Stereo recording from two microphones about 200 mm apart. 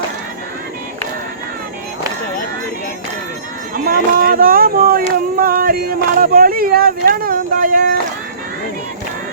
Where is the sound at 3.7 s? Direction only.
45° right (ahead or behind).